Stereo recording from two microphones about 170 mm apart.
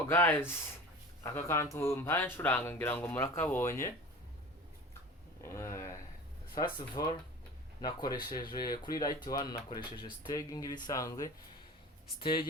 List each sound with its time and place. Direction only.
0.1 s speech: 15° left (ahead or behind)
5.4 s a sound: 15° left (ahead or behind)
6.6 s speech: 25° left (ahead or behind)